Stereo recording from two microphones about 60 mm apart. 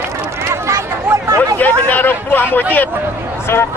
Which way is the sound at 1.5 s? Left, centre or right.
Left.